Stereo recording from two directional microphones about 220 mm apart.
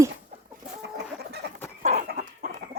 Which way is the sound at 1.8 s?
35° right (ahead or behind).